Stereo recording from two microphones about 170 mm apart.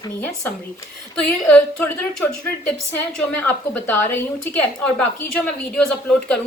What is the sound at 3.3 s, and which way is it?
A woman's voice, 10° left (ahead or behind).